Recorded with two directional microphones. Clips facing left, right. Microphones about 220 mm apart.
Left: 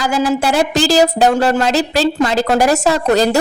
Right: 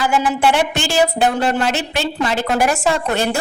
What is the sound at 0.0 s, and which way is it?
Speech, 40° left (ahead or behind).